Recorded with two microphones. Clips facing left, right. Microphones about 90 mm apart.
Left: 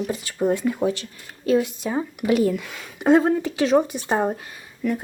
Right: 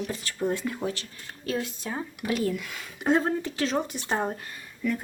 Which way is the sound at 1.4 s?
15° left (ahead or behind).